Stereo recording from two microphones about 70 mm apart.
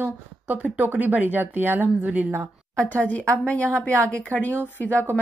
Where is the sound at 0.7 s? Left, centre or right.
Right.